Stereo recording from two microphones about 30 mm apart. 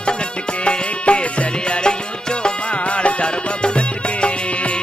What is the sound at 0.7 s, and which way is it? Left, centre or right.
Music, left.